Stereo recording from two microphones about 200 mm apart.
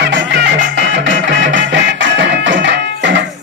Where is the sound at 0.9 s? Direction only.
70° right (ahead or behind).